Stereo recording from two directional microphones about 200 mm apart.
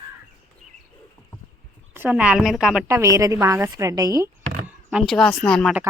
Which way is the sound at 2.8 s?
15° right (ahead or behind).